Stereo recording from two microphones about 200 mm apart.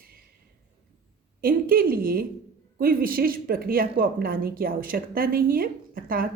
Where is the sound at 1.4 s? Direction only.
45° right (ahead or behind).